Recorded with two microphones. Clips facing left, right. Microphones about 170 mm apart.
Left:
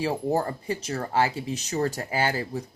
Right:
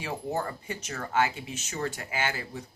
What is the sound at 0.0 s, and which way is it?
Speech, 35° left (ahead or behind).